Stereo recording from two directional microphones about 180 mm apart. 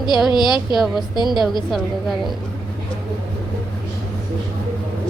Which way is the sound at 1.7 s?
Centre (ahead or behind).